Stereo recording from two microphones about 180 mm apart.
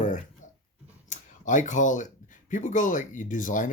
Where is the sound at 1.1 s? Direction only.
45° left (ahead or behind).